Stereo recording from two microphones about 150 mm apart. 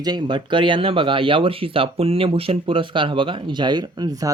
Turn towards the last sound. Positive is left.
turn(degrees=-25)  # may be behind; listen again after turning